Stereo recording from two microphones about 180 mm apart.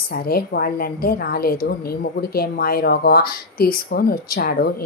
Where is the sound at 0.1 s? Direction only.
60° left (ahead or behind).